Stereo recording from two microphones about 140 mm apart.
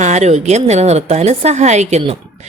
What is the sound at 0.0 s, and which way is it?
Speech, 55° right (ahead or behind).